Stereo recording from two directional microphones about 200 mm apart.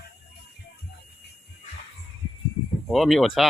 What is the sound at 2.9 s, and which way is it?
Speech, centre (ahead or behind).